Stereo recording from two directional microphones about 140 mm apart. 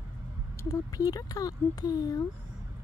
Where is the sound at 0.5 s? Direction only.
20° left (ahead or behind).